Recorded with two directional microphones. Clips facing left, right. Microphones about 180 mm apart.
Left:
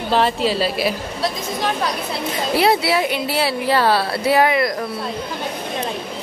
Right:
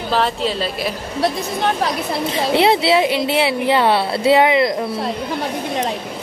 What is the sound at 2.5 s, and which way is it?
Speech, 25° right (ahead or behind).